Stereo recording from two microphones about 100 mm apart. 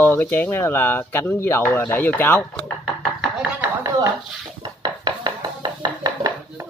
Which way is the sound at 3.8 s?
40° right (ahead or behind).